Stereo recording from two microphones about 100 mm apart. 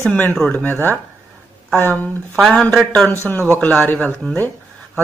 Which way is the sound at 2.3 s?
Centre (ahead or behind).